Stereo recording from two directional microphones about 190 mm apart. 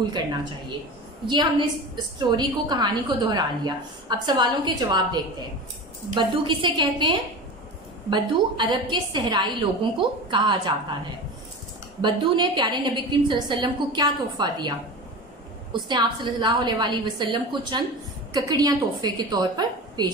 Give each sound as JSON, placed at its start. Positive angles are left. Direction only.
{"t": 1.2, "sound": "a woman's voice", "side_deg": -25}
{"t": 12.0, "sound": "a woman's voice", "side_deg": -25}